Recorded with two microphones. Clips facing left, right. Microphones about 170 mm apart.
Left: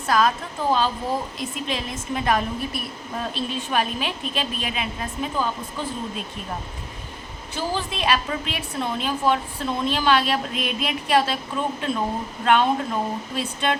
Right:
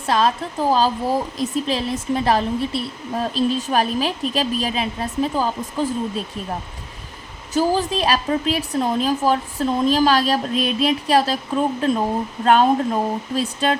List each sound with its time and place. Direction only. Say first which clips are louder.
0.0 s a woman's voice: right 2 dB; 30° right (ahead or behind)
7.5 s a woman's voice: right 9 dB; 40° right (ahead or behind)